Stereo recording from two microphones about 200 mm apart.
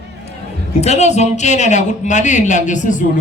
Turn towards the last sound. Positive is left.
turn(degrees=40)  # may be behind; listen again after turning